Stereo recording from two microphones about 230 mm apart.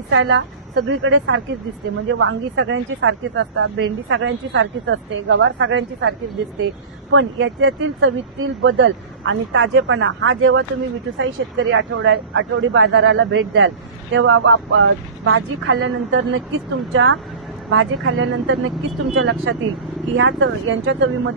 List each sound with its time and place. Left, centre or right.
0.1 s a woman's voice: right